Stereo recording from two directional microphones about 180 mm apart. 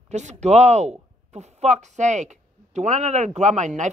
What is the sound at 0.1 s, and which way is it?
Speech, 40° right (ahead or behind).